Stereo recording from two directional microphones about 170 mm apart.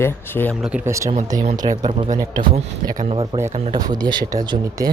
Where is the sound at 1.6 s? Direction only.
35° right (ahead or behind).